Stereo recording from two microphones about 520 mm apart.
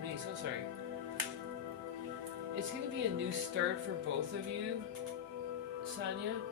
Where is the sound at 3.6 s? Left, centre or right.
Centre.